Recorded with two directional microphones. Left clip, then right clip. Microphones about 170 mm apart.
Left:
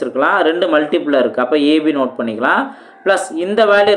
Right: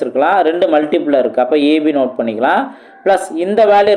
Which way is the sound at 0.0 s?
20° right (ahead or behind).